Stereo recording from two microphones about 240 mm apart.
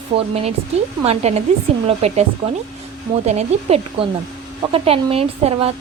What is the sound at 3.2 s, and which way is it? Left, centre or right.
Speech, right.